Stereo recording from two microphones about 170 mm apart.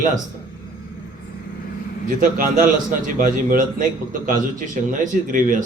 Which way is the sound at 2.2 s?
55° right (ahead or behind).